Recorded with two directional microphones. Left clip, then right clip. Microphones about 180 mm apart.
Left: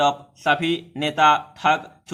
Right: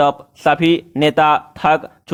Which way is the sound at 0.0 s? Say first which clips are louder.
Right 6 dB; 45° right (ahead or behind).